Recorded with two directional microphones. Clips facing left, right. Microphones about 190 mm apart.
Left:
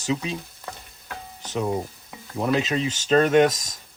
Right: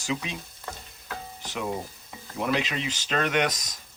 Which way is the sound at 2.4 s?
35° left (ahead or behind).